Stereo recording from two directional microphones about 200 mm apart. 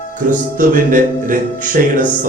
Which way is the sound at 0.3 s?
40° right (ahead or behind).